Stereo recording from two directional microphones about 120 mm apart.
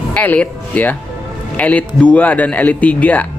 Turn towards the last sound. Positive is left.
turn(degrees=15)  # may be behind; listen again after turning